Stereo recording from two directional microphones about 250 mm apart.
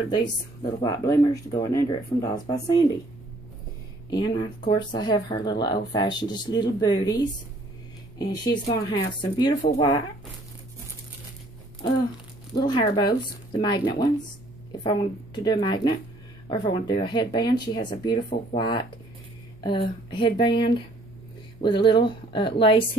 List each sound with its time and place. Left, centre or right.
0.1 s speech: centre
4.1 s a woman's voice: centre
12.5 s speech: centre
20.1 s a woman's voice: centre